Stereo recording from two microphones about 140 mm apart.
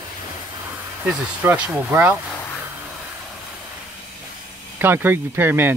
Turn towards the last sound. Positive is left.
turn(degrees=-15)  # may be behind; listen again after turning